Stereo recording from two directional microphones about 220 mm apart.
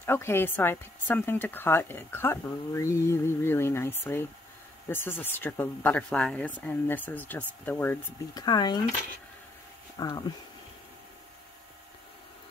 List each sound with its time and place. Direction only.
0.0 s a woman's voice: 10° left (ahead or behind)
9.9 s a woman's voice: 15° left (ahead or behind)